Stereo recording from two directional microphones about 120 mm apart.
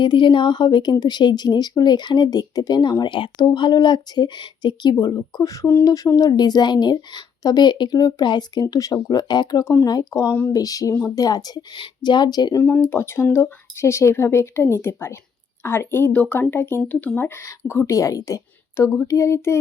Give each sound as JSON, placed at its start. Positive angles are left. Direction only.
{"t": 0.0, "sound": "a woman's voice", "side_deg": 45}
{"t": 12.5, "sound": "speech", "side_deg": 15}